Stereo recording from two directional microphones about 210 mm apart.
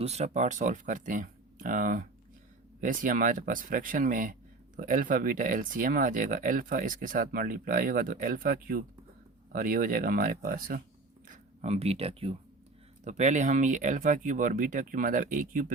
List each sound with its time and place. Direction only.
0.0 s speech: 30° right (ahead or behind)
11.3 s speech: 30° right (ahead or behind)